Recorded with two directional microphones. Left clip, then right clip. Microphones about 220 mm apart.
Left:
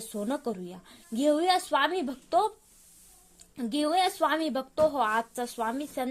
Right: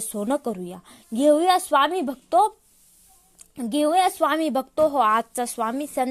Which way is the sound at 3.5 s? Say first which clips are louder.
Right 6 dB; 35° right (ahead or behind).